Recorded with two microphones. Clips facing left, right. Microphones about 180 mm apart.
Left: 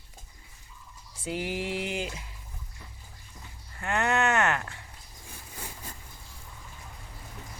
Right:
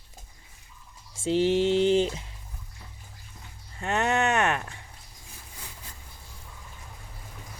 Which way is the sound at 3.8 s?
20° right (ahead or behind).